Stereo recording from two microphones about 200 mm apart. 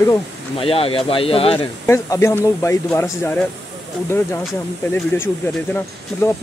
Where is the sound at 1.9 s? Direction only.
15° left (ahead or behind).